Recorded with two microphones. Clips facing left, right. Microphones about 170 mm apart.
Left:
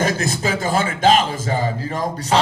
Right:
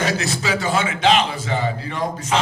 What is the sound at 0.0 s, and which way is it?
Speech, 50° left (ahead or behind).